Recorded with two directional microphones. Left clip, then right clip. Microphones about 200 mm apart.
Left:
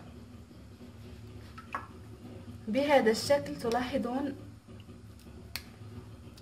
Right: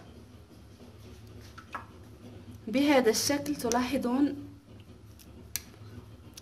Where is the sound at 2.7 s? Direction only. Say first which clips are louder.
Right 1 dB; 50° right (ahead or behind).